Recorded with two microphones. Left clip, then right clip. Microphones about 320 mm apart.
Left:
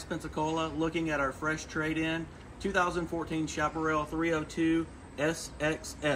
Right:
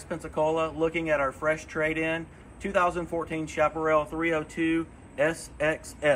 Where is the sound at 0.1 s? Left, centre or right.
Centre.